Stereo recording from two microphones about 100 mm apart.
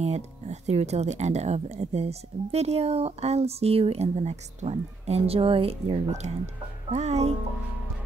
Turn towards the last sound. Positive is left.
turn(degrees=-90)